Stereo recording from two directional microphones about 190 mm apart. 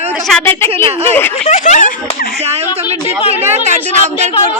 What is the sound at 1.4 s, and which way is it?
Speech, 40° left (ahead or behind).